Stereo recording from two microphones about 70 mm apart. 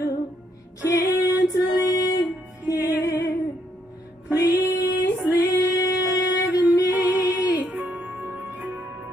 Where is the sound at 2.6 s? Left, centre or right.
Left.